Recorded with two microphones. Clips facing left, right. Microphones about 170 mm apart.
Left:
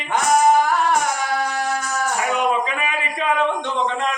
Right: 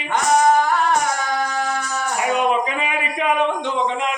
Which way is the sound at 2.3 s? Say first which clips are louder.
Right 4 dB; 20° right (ahead or behind).